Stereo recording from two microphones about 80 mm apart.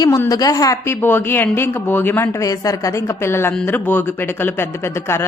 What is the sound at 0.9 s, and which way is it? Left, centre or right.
Speech, left.